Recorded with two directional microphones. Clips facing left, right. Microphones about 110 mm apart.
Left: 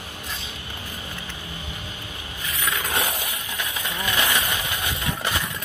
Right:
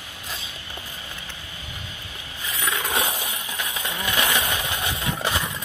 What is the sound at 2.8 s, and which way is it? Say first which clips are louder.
Roaring cats: right 1 dB; 15° right (ahead or behind).